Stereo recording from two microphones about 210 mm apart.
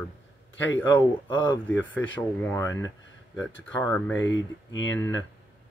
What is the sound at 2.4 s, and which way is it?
Speech, 15° left (ahead or behind).